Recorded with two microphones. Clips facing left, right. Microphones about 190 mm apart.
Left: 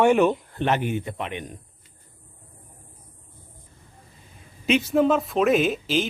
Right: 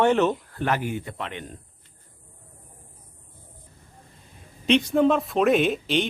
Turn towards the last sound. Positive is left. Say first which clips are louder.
# even
turn(degrees=0)  # may be behind; listen again after turning